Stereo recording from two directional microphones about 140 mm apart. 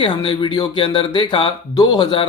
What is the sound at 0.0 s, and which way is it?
Speech, 40° left (ahead or behind).